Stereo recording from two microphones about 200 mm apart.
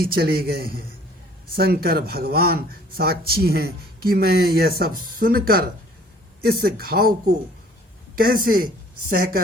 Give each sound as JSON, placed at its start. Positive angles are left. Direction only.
{"t": 0.0, "sound": "speech", "side_deg": -50}